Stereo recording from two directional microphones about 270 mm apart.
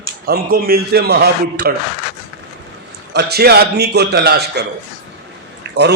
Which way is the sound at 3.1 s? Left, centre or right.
Right.